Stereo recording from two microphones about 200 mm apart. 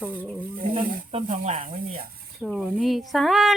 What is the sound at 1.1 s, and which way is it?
Speech, 35° right (ahead or behind).